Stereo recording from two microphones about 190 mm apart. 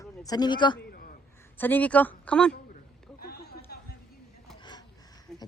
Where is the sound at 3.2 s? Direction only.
55° left (ahead or behind).